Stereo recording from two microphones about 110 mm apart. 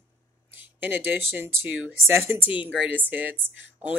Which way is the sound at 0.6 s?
15° right (ahead or behind).